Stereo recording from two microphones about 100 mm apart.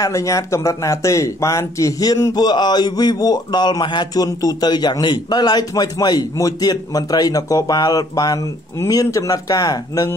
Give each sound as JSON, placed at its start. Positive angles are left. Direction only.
{"t": 0.0, "sound": "speech", "side_deg": 35}
{"t": 2.3, "sound": "speech", "side_deg": 45}